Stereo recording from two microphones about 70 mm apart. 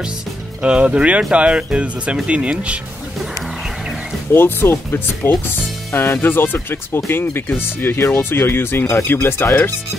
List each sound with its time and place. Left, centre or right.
0.6 s speech: centre
4.3 s speech: left